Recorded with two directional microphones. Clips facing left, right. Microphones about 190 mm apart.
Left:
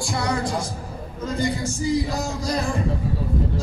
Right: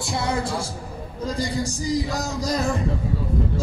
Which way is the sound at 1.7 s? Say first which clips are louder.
Left 2 dB; 40° right (ahead or behind).